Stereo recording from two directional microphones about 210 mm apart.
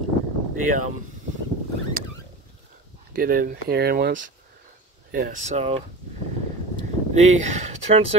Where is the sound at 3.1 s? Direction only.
45° right (ahead or behind).